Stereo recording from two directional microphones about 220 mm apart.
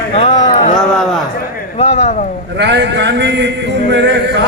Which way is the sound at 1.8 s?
30° left (ahead or behind).